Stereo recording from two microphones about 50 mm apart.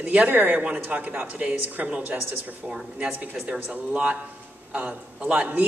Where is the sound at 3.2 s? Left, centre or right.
Right.